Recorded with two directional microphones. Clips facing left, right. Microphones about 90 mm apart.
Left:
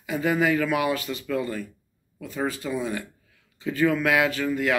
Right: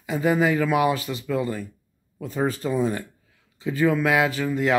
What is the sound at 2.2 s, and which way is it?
Speech, 35° right (ahead or behind).